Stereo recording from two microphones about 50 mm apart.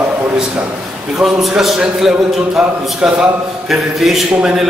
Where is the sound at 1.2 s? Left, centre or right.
Centre.